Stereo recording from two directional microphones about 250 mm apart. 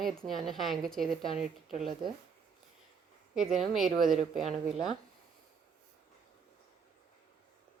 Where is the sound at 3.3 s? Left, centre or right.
Centre.